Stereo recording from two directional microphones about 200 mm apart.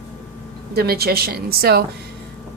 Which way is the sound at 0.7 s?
50° right (ahead or behind).